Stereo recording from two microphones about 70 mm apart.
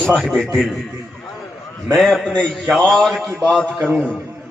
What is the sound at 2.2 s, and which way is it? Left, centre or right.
A man's voice, centre.